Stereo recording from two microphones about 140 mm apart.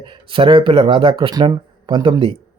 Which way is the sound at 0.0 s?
35° right (ahead or behind).